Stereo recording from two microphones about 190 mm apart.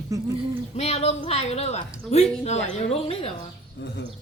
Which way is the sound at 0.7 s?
35° left (ahead or behind).